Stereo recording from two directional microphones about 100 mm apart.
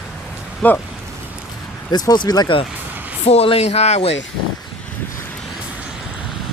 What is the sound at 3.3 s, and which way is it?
Speech, 85° left.